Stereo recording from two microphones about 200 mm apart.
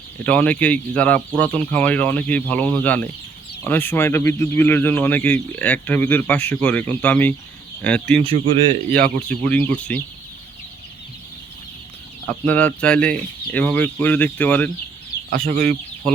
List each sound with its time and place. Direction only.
0.3 s speech: 5° left (ahead or behind)
8.2 s speech: 25° right (ahead or behind)
9.4 s speech: 5° left (ahead or behind)
12.3 s speech: 5° left (ahead or behind)
15.3 s speech: 45° right (ahead or behind)
16.1 s speech: 5° left (ahead or behind)